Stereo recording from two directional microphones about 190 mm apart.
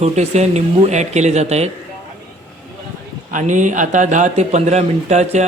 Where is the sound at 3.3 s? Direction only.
40° right (ahead or behind).